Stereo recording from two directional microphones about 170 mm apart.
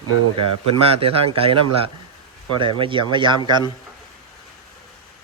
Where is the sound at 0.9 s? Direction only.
35° right (ahead or behind).